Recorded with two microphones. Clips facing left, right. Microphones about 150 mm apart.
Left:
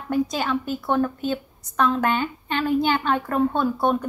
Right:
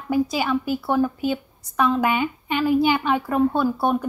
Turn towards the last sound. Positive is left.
turn(degrees=-10)  # may be behind; listen again after turning